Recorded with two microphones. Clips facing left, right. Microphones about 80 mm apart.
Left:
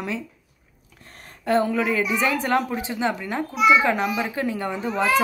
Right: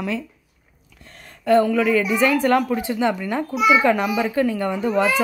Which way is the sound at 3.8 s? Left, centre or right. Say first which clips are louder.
Right 3 dB; centre.